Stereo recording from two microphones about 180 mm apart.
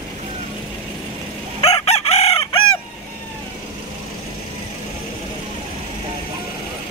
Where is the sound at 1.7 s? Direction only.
35° left (ahead or behind).